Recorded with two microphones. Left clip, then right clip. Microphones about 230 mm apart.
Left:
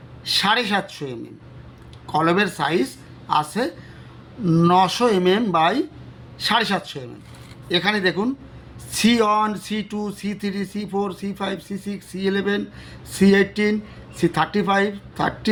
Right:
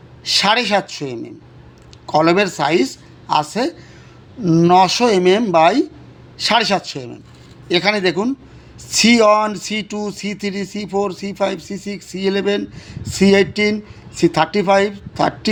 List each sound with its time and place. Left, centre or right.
0.3 s speech: right